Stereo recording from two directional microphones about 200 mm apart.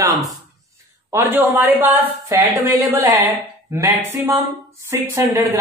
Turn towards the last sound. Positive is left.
turn(degrees=-15)  # may be behind; listen again after turning